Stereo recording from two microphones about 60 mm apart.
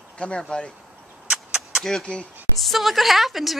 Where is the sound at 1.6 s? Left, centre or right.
Centre.